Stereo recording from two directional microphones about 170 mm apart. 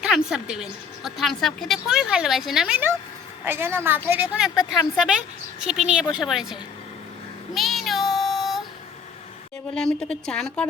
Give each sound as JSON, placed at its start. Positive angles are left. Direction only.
{"t": 0.0, "sound": "a woman's voice", "side_deg": -5}
{"t": 7.5, "sound": "child singing", "side_deg": 0}
{"t": 9.7, "sound": "a woman's voice", "side_deg": 5}